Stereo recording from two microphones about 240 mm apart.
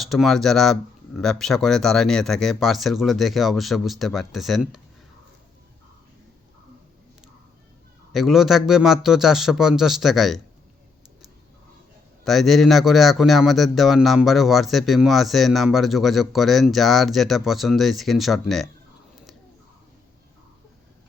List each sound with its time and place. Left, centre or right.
0.0 s a man's voice: centre
8.1 s a man's voice: centre
12.2 s a man's voice: centre